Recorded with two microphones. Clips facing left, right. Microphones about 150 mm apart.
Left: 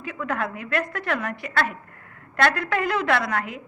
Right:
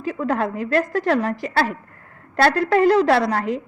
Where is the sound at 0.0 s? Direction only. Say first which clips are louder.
Right 6 dB; 35° right (ahead or behind).